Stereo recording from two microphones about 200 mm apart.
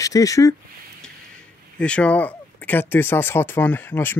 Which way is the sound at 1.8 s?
5° left (ahead or behind).